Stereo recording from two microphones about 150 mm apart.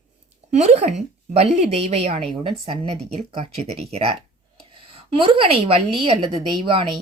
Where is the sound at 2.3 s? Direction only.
35° right (ahead or behind).